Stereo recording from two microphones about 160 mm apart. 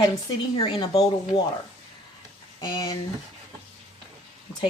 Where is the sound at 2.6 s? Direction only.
25° left (ahead or behind).